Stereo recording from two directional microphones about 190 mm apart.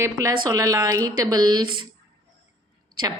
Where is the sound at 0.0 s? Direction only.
15° right (ahead or behind).